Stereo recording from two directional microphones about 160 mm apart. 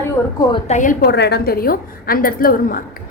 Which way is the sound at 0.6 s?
50° left (ahead or behind).